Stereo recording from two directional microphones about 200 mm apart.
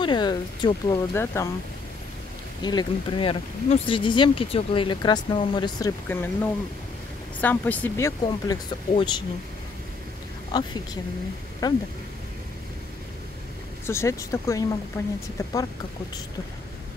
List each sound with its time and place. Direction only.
0.0 s speech: 20° left (ahead or behind)
2.6 s speech: 20° left (ahead or behind)
8.3 s speech: 20° left (ahead or behind)
10.5 s speech: 20° left (ahead or behind)
13.8 s speech: 15° left (ahead or behind)